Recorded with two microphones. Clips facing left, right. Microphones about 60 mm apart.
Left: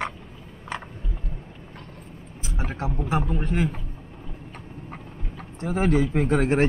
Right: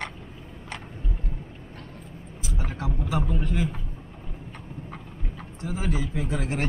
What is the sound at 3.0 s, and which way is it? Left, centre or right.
Speech, left.